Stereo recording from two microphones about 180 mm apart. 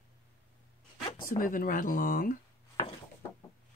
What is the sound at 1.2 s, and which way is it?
Speech, 50° left (ahead or behind).